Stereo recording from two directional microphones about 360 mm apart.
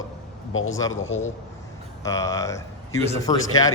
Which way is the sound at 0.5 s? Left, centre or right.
Left.